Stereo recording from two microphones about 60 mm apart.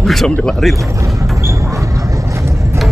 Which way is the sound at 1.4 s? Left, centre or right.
Right.